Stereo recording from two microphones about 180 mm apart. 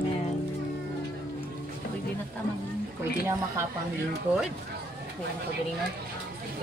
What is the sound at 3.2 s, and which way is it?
Speech, 15° right (ahead or behind).